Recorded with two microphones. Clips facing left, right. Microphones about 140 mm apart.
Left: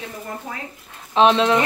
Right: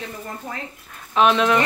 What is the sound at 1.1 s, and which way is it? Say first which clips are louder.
Speech: left 2 dB; 30° left (ahead or behind).